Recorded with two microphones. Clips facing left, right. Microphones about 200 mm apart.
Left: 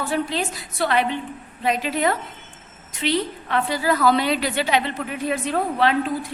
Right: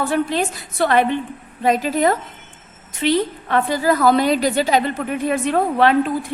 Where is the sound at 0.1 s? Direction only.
55° right (ahead or behind).